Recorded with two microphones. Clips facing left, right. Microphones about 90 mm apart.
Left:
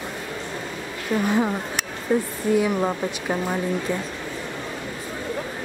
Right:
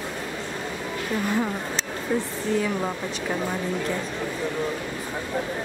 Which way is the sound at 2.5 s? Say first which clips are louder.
Left 5 dB; 15° left (ahead or behind).